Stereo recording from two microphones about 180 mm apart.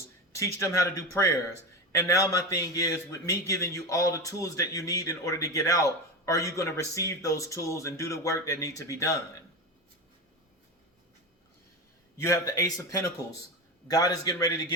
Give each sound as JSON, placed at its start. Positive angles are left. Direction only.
{"t": 0.3, "sound": "a man's voice", "side_deg": 15}
{"t": 12.1, "sound": "a man's voice", "side_deg": 15}